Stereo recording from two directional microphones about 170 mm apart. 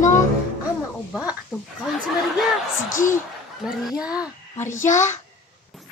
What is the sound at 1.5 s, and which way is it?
Speech, 5° right (ahead or behind).